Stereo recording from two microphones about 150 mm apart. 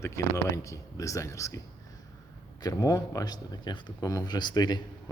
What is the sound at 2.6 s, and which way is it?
A man's voice, 25° left (ahead or behind).